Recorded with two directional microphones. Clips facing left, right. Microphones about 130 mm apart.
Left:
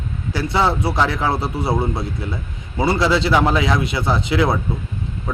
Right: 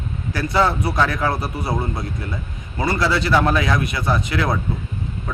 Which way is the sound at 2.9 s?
20° left (ahead or behind).